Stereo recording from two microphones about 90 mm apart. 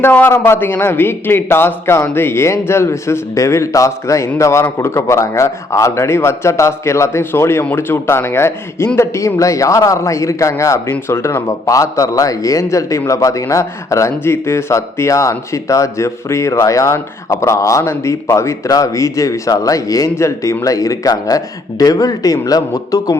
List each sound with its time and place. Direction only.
0.0 s a man's voice: 20° left (ahead or behind); by 23.1 s 40° left (ahead or behind)